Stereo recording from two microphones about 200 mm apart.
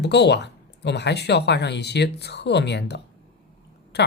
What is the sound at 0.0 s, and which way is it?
Speech, 55° left (ahead or behind).